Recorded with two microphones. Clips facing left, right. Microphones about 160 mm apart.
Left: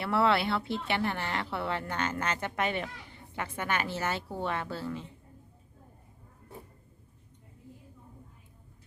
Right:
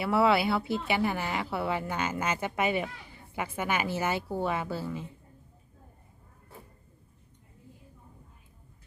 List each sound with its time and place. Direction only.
0.0 s speech: 10° right (ahead or behind)